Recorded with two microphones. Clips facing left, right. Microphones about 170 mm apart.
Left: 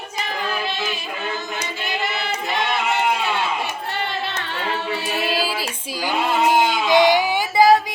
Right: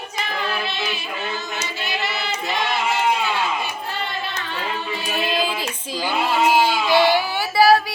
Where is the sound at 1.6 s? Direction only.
50° left (ahead or behind).